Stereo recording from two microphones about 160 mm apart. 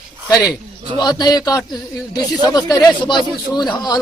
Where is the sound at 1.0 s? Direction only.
25° left (ahead or behind).